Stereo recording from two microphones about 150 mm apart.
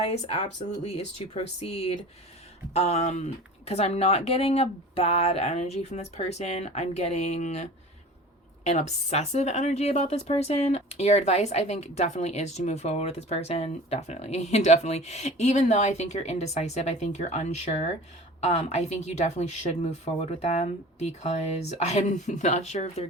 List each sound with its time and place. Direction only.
0.0 s a woman's voice: 40° left (ahead or behind)